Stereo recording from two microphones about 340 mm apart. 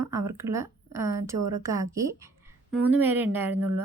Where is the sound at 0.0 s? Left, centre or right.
Centre.